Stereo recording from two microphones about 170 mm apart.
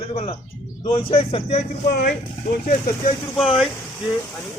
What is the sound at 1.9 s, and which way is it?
Speech, 70° left (ahead or behind).